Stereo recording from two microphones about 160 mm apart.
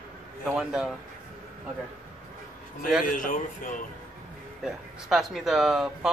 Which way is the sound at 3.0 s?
55° left (ahead or behind).